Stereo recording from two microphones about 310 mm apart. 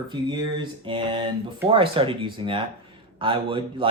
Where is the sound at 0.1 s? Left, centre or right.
Centre.